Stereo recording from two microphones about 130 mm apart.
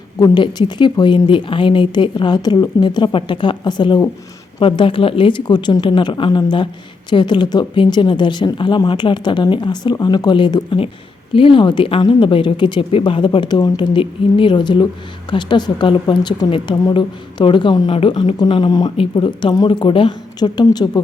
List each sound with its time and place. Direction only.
0.2 s speech: 40° left (ahead or behind)